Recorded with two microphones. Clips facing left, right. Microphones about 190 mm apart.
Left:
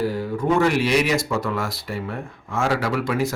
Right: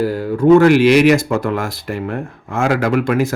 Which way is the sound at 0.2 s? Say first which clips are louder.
Right 13 dB; 85° right.